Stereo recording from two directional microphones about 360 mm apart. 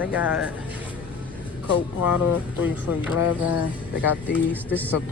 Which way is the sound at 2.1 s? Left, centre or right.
Left.